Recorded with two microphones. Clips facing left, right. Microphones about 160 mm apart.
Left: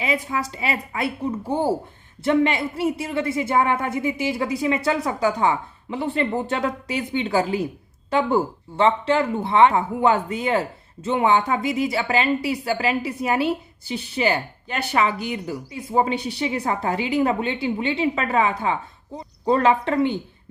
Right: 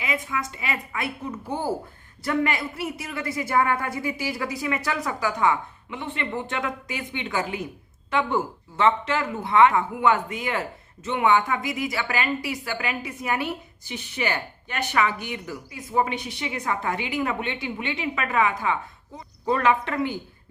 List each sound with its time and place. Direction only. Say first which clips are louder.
0.0 s a woman's voice: left 4 dB; 30° left (ahead or behind)